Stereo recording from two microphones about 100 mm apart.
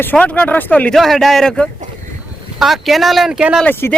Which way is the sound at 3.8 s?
25° left (ahead or behind).